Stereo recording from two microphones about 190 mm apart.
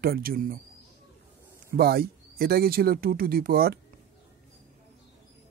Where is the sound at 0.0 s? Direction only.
50° right (ahead or behind).